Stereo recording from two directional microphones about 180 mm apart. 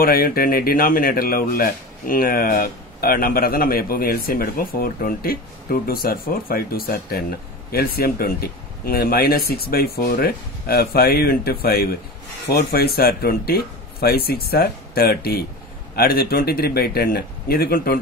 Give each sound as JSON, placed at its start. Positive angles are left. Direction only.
{"t": 0.0, "sound": "speech", "side_deg": 55}